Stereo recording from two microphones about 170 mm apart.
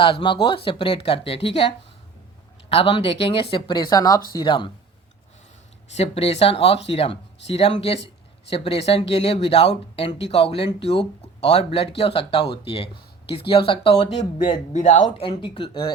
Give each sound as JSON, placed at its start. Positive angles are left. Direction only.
{"t": 0.0, "sound": "speech", "side_deg": 30}
{"t": 2.6, "sound": "speech", "side_deg": 35}
{"t": 5.9, "sound": "speech", "side_deg": 40}
{"t": 15.2, "sound": "speech", "side_deg": 30}